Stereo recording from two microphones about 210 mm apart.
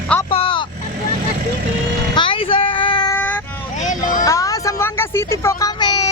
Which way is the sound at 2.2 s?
25° left (ahead or behind).